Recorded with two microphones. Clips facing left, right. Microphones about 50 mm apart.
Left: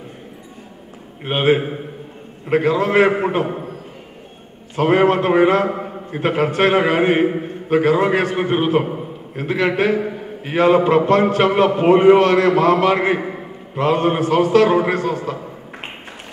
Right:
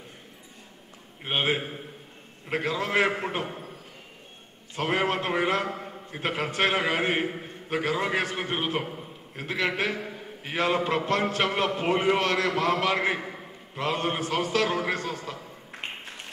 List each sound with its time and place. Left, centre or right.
1.2 s a man's voice: centre
4.7 s a man's voice: centre
5.7 s a sound: left
6.1 s a man's voice: centre
7.2 s a man's voice: left
7.6 s a man's voice: centre
8.8 s a sound: left
9.3 s a man's voice: centre
13.2 s a sound: left
13.7 s a man's voice: centre